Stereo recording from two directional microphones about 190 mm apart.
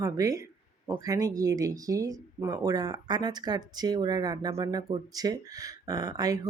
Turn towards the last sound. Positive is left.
turn(degrees=-20)  # may be behind; listen again after turning